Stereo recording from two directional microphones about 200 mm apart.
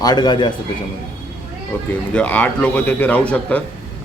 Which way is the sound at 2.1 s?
5° left (ahead or behind).